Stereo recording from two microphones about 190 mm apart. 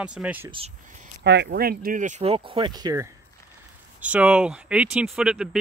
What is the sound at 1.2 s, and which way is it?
Speech, 65° right (ahead or behind).